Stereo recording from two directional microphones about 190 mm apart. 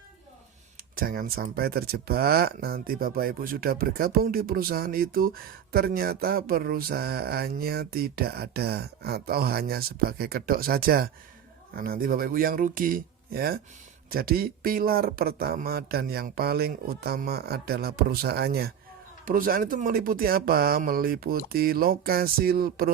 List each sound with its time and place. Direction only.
0.9 s speech: 50° right (ahead or behind)